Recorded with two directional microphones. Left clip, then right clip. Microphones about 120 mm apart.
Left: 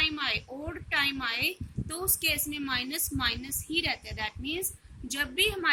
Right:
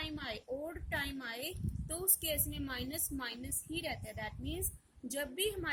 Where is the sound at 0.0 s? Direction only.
50° right (ahead or behind).